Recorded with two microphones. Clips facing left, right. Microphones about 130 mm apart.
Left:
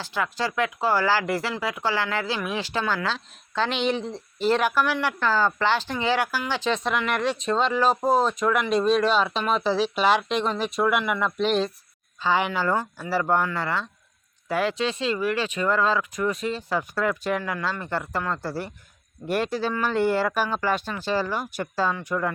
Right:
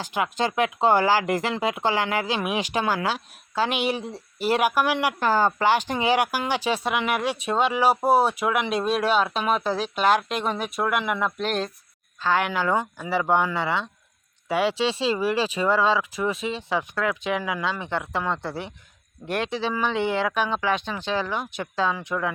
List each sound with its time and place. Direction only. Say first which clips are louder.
0.0 s speech: right 2 dB; 15° right (ahead or behind); by 11.7 s centre (ahead or behind)
12.2 s speech: even; 10° left (ahead or behind)
12.5 s speech: right 1 dB; centre (ahead or behind)
13.6 s speech: right 2 dB; 20° right (ahead or behind)
14.4 s speech: right 2 dB; 5° right (ahead or behind)
14.8 s speech: right 2 dB; 30° right (ahead or behind)
15.6 s speech: right 1 dB; 5° right (ahead or behind)